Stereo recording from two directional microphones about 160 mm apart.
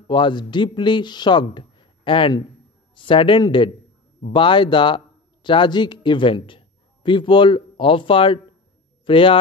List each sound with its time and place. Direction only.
0.0 s a man's voice: 30° left (ahead or behind)